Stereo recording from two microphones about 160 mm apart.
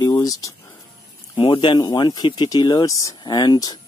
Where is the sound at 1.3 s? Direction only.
30° left (ahead or behind).